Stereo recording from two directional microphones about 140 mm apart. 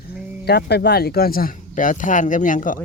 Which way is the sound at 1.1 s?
90° left.